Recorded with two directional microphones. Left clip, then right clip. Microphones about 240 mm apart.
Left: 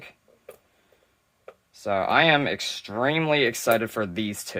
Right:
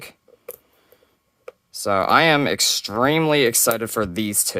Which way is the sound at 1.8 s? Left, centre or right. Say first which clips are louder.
Right 5 dB; right.